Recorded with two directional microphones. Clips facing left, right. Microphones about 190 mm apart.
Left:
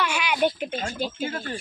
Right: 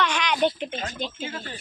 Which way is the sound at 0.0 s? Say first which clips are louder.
Even; 10° left (ahead or behind).